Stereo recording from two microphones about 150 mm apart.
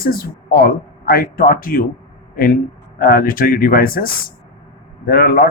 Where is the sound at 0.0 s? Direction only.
75° left (ahead or behind).